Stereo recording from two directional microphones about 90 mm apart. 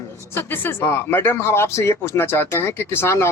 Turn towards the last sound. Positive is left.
turn(degrees=30)  # may be behind; listen again after turning